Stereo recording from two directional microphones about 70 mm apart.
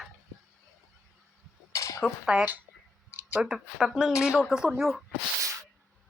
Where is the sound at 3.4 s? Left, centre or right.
Centre.